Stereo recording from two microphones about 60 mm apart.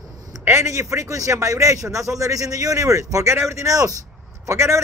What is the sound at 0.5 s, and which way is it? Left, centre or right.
A man's voice, right.